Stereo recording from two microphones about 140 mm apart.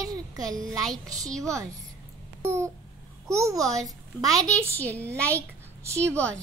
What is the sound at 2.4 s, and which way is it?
Babbling, 15° right (ahead or behind).